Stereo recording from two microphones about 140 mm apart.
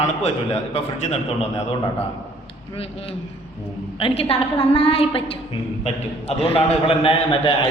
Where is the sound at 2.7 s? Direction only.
45° left (ahead or behind).